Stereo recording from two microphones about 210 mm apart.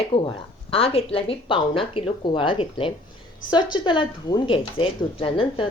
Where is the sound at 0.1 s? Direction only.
25° left (ahead or behind).